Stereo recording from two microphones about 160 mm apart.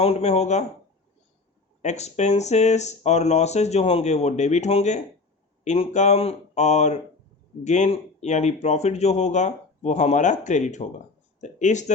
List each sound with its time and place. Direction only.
0.0 s speech: 40° left (ahead or behind)
1.8 s speech: 45° left (ahead or behind)